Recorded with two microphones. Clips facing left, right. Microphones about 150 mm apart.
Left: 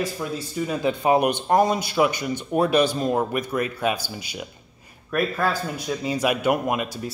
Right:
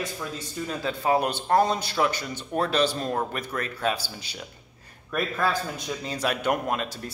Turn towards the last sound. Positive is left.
turn(degrees=10)  # may be behind; listen again after turning